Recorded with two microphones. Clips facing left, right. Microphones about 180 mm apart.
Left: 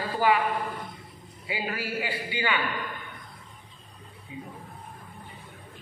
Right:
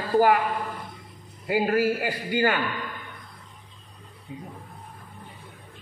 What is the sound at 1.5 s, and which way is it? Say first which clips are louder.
A man's voice: right 10 dB; 45° right (ahead or behind).